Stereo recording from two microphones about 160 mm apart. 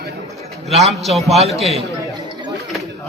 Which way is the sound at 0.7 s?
40° right (ahead or behind).